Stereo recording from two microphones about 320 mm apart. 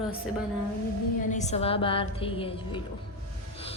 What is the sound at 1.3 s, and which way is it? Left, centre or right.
A woman's voice, left.